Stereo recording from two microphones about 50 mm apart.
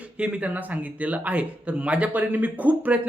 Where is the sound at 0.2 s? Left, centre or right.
Right.